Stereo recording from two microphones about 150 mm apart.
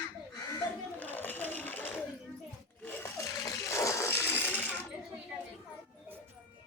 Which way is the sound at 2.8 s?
15° left (ahead or behind).